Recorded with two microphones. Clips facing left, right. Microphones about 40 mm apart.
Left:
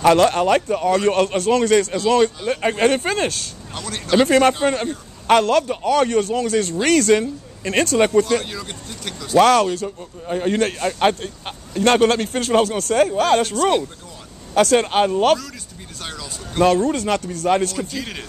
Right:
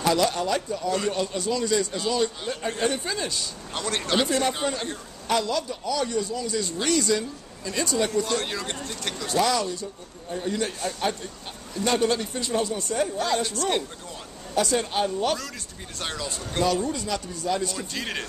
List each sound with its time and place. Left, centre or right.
0.0 s speech: left
3.7 s speech: centre
4.3 s speech: left
8.5 s speech: centre
9.4 s speech: left
16.0 s speech: centre
16.8 s speech: left
17.7 s speech: centre